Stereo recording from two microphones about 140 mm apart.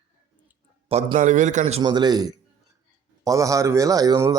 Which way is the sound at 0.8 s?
40° right (ahead or behind).